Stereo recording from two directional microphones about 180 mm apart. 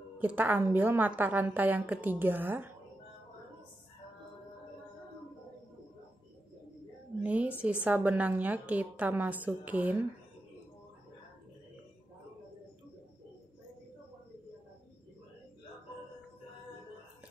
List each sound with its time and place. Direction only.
0.2 s a woman's voice: 10° right (ahead or behind)
7.2 s a woman's voice: 10° right (ahead or behind)